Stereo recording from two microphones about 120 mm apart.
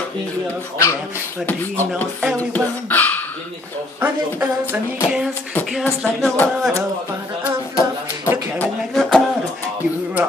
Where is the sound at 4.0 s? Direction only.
15° right (ahead or behind).